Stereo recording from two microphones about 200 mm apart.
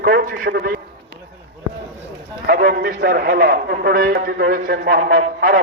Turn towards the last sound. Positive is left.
turn(degrees=-50)  # may be behind; listen again after turning